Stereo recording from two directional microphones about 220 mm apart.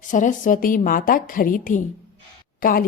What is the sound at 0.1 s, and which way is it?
Speech, 35° left (ahead or behind).